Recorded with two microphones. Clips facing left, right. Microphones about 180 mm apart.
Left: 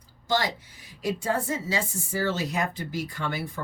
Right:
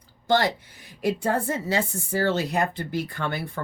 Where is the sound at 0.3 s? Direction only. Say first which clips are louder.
Right 5 dB; 55° right (ahead or behind).